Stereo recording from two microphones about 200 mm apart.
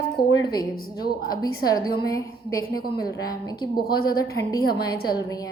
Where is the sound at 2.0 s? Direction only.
15° left (ahead or behind).